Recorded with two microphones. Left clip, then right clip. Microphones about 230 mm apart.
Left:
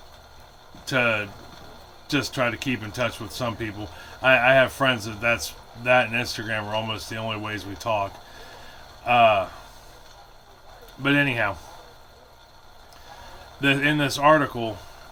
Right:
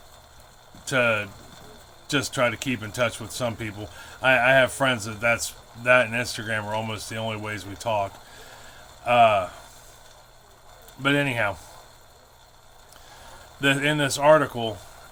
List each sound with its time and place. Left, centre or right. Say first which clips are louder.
0.9 s speech: even; right
11.0 s speech: left 1 dB; right
13.6 s speech: left 1 dB; right